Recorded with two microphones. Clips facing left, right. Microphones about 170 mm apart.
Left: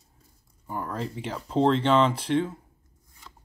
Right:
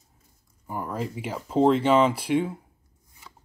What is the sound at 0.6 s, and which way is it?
Speech, 10° right (ahead or behind).